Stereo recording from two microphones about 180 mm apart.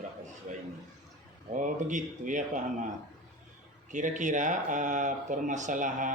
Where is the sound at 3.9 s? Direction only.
45° right (ahead or behind).